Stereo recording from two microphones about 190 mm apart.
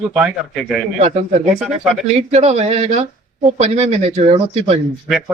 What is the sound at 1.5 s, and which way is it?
Speech, 5° right (ahead or behind).